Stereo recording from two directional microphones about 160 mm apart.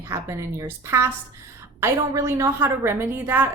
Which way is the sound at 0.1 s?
20° right (ahead or behind).